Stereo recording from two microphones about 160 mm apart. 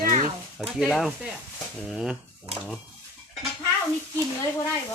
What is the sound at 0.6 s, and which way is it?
Speech, centre (ahead or behind).